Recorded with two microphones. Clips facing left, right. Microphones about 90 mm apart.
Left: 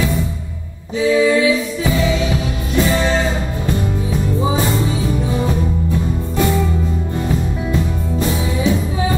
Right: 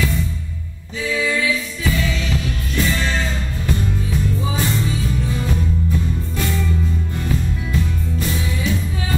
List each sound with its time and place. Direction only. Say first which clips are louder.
0.9 s music: left 8 dB; 20° left (ahead or behind)
4.4 s music: left 5 dB; 25° left (ahead or behind)
7.7 s music: left 3 dB; 25° left (ahead or behind)